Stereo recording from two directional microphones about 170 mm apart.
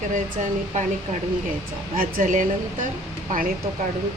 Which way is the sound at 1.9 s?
55° right (ahead or behind).